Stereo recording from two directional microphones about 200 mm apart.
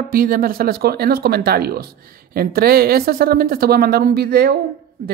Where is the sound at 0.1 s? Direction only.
45° right (ahead or behind).